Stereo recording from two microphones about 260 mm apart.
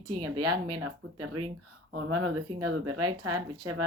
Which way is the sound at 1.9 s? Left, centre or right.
Right.